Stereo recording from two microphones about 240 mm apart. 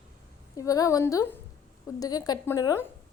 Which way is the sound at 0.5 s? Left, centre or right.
Centre.